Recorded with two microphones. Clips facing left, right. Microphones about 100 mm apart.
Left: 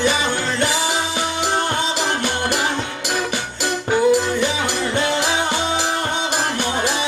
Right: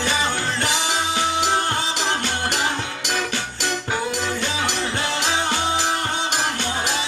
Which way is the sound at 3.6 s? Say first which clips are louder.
Left 10 dB; 15° left (ahead or behind).